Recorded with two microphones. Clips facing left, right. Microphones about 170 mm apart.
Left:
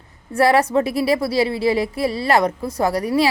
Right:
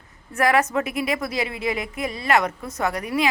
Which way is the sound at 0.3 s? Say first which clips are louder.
Left 5 dB; 35° left (ahead or behind).